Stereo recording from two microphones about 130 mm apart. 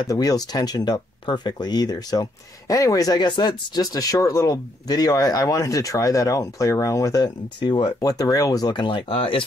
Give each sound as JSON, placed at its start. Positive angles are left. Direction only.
{"t": 0.0, "sound": "speech", "side_deg": 30}